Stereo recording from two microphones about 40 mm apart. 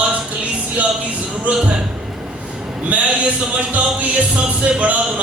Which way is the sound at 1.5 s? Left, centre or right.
Right.